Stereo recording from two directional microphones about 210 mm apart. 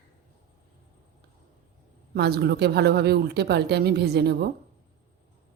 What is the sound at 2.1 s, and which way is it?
Speech, 50° right (ahead or behind).